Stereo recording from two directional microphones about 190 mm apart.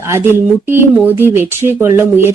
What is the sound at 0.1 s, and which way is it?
Speech, 10° right (ahead or behind).